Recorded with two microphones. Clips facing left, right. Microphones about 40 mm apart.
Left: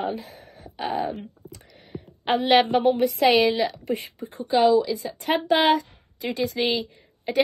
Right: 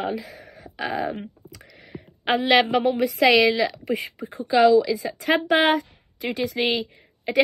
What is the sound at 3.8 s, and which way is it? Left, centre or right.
Speech, right.